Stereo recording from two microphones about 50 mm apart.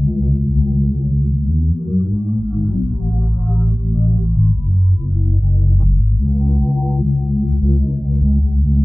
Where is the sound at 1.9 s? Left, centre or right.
Centre.